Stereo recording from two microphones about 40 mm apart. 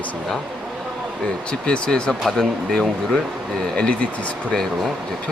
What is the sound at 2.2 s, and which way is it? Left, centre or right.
Speech, centre.